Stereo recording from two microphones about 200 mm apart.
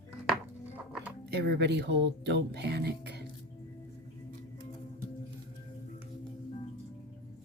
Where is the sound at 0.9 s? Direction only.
5° right (ahead or behind).